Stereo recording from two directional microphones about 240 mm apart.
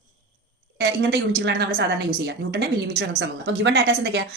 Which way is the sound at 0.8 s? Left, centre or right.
Right.